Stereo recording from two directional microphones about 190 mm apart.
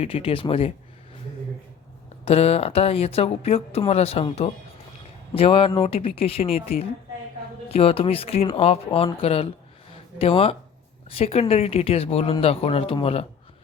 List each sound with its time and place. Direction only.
0.0 s speech: 30° left (ahead or behind)
2.2 s speech: 30° left (ahead or behind)